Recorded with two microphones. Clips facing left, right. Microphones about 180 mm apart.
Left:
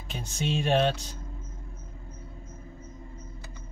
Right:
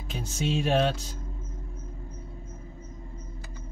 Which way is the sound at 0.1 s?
5° right (ahead or behind).